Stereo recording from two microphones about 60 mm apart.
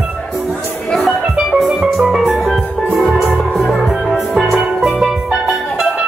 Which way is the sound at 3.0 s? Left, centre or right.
Centre.